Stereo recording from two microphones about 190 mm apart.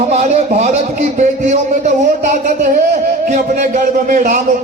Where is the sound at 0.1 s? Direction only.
35° right (ahead or behind).